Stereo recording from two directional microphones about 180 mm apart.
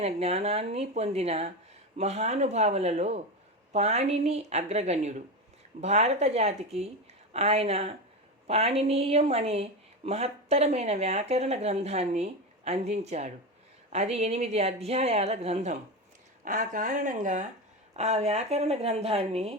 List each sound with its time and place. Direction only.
0.0 s speech: 35° right (ahead or behind)